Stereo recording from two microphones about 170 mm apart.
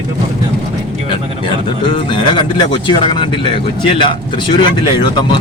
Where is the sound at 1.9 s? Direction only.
30° left (ahead or behind).